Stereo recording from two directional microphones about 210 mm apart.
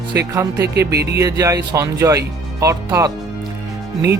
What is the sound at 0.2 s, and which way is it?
Speech, 15° right (ahead or behind).